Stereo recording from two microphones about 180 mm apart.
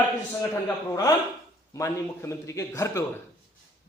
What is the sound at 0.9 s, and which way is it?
A man's voice, 20° left (ahead or behind).